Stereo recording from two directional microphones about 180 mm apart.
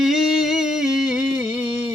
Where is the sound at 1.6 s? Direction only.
35° left (ahead or behind).